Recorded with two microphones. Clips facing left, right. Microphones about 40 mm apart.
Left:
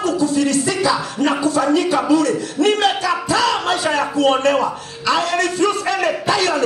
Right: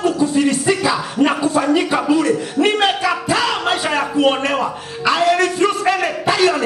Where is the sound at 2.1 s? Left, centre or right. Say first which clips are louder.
Even; right.